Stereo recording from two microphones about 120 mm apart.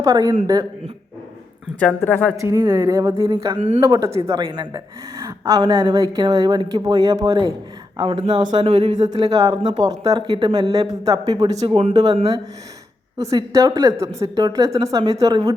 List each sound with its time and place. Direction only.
0.0 s speech: 30° right (ahead or behind)
1.8 s a woman's voice: 15° left (ahead or behind)
2.3 s speech: 25° right (ahead or behind)
7.9 s speech: 40° right (ahead or behind)
13.1 s speech: 30° right (ahead or behind)